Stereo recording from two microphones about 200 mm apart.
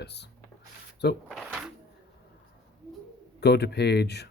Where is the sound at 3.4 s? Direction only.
55° left (ahead or behind).